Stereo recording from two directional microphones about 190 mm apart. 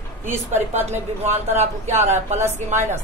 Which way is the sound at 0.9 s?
35° right (ahead or behind).